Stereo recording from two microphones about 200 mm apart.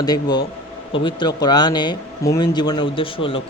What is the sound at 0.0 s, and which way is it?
Speech, 20° left (ahead or behind).